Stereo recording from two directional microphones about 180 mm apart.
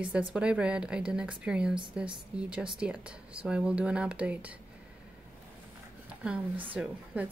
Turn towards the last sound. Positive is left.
turn(degrees=-10)  # may be behind; listen again after turning